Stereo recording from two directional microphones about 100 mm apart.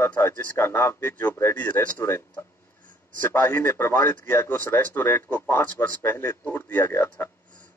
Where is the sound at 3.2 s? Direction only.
20° left (ahead or behind).